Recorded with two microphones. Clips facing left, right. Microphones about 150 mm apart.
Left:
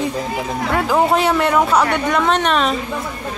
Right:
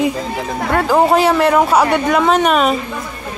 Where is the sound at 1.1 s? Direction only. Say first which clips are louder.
Right 3 dB; centre (ahead or behind).